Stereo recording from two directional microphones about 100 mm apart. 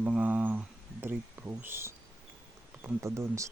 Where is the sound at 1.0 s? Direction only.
20° right (ahead or behind).